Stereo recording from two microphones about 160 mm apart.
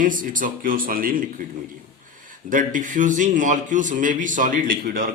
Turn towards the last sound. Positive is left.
turn(degrees=-65)  # may be behind; listen again after turning